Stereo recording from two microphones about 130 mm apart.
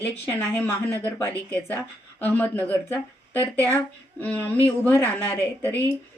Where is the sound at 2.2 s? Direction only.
10° left (ahead or behind).